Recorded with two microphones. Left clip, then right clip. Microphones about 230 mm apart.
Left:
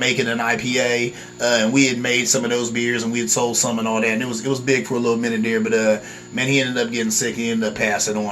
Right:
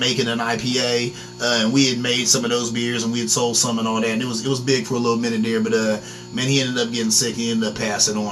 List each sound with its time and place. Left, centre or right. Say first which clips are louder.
0.0 s speech: left 1 dB; centre
5.2 s speech: left 1 dB; centre